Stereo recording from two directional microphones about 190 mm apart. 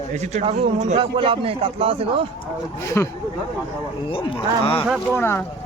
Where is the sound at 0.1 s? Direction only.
35° right (ahead or behind).